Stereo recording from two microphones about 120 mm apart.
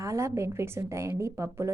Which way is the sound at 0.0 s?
25° right (ahead or behind).